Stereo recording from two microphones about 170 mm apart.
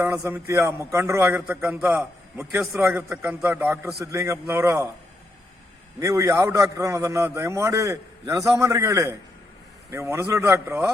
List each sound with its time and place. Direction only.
0.0 s a man's voice: 15° right (ahead or behind)
2.7 s a man's voice: centre (ahead or behind)
4.0 s a man's voice: 20° right (ahead or behind)
6.0 s a man's voice: 20° right (ahead or behind)